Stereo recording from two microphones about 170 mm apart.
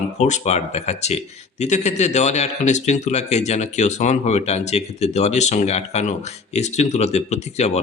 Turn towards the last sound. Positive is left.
turn(degrees=40)  # may be behind; listen again after turning